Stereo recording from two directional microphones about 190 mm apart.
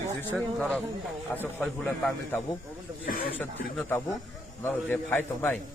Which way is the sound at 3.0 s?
50° left (ahead or behind).